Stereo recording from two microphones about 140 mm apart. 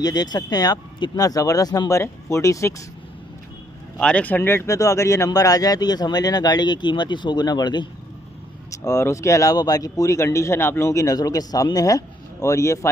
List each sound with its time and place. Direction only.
0.0 s a man's voice: 30° left (ahead or behind)
4.0 s a man's voice: 10° left (ahead or behind); by 7.9 s 30° left (ahead or behind)
8.8 s a man's voice: 20° left (ahead or behind)